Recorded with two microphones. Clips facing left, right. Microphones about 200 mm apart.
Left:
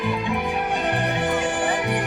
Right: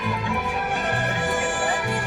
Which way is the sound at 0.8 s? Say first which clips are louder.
Left 3 dB; 20° left (ahead or behind).